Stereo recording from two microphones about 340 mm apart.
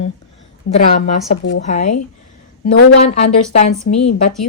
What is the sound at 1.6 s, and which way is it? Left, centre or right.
Speech, centre.